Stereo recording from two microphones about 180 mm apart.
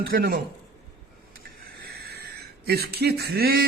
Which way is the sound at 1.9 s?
60° right (ahead or behind).